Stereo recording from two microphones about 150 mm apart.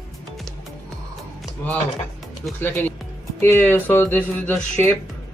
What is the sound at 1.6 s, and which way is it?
Speech, 10° left (ahead or behind).